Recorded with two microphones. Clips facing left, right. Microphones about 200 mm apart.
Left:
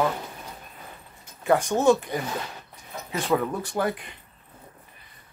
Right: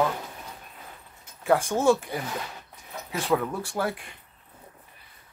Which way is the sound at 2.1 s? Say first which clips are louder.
Left 2 dB; 5° right (ahead or behind).